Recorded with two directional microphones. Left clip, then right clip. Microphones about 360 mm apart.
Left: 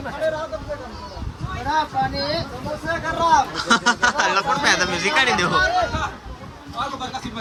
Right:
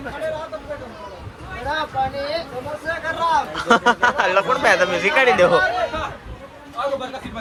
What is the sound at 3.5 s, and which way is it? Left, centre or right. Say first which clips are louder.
Speech: right 2 dB; centre.